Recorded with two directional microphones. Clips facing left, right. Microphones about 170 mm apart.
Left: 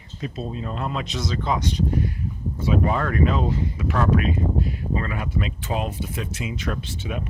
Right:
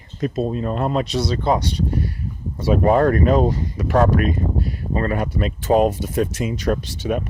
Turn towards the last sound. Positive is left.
turn(degrees=-45)  # may be behind; listen again after turning